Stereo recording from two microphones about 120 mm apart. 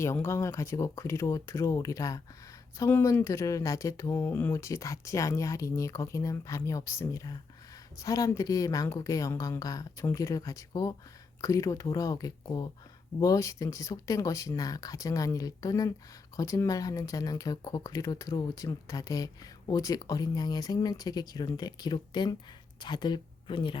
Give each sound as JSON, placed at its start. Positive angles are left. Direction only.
{"t": 0.0, "sound": "speech", "side_deg": 25}